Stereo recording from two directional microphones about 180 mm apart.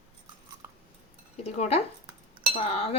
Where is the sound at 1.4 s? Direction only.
35° left (ahead or behind).